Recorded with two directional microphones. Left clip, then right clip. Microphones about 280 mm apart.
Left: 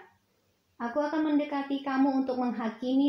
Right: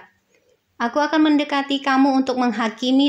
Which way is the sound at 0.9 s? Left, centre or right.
Left.